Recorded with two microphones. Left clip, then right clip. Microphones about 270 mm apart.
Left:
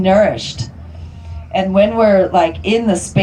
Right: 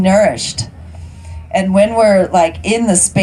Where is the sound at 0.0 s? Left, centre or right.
Right.